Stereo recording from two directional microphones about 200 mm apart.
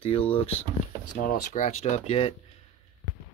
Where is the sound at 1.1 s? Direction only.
45° left (ahead or behind); by 2.3 s 30° left (ahead or behind).